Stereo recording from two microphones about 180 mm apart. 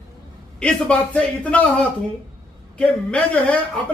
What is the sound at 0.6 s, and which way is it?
A man's voice, 5° left (ahead or behind).